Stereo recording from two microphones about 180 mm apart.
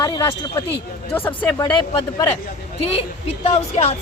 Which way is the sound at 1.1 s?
10° left (ahead or behind).